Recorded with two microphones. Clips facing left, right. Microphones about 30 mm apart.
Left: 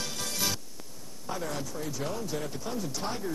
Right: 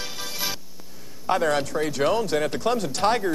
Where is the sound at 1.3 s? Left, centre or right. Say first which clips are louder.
Right 13 dB; right.